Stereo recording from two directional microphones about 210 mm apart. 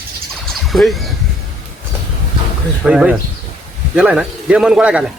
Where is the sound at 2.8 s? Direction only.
5° right (ahead or behind).